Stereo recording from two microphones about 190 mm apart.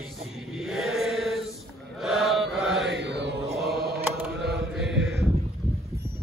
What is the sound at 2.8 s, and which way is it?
Mantra, 65° right (ahead or behind).